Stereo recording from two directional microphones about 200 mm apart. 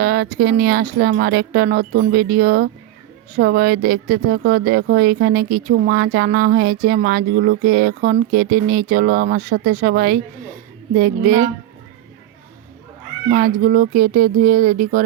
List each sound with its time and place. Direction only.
0.0 s speech: 50° right (ahead or behind)
13.3 s speech: 45° right (ahead or behind)